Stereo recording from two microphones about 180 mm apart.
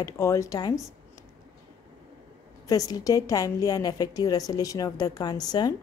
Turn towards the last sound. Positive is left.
turn(degrees=20)  # may be behind; listen again after turning